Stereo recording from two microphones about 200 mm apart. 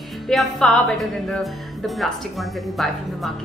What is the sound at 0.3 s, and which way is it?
A woman's voice, centre (ahead or behind).